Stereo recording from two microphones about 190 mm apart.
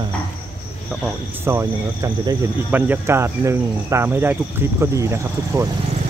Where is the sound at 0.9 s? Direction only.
5° left (ahead or behind).